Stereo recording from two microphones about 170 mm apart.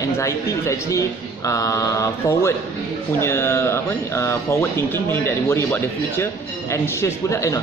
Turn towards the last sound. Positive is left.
turn(degrees=15)  # may be behind; listen again after turning